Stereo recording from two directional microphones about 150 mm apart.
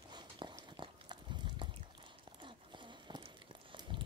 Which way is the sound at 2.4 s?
30° right (ahead or behind).